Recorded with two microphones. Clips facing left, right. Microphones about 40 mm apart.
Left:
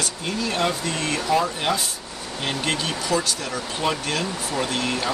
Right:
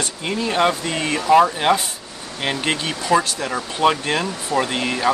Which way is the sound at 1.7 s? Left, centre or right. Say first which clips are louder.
Right 6 dB; right.